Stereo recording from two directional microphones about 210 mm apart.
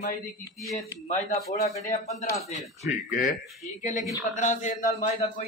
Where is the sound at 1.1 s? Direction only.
45° left (ahead or behind).